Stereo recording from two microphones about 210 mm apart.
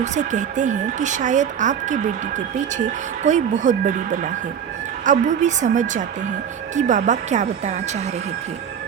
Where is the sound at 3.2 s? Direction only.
35° right (ahead or behind).